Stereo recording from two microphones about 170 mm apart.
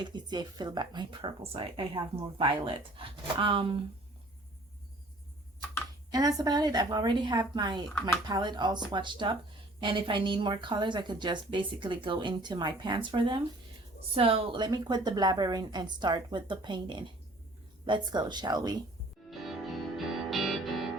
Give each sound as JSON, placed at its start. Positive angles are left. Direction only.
{"t": 0.0, "sound": "speech", "side_deg": -25}
{"t": 6.1, "sound": "speech", "side_deg": -20}
{"t": 19.3, "sound": "music", "side_deg": 0}